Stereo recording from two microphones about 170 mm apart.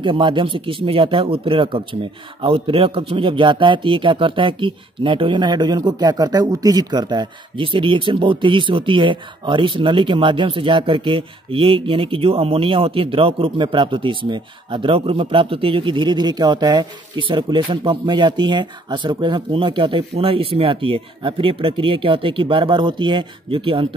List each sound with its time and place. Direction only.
0.0 s a man's voice: 30° right (ahead or behind)